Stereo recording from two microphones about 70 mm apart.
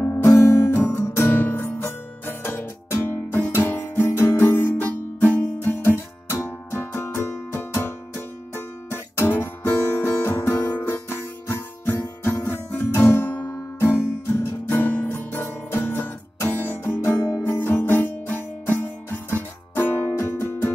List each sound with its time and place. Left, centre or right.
0.0 s music: left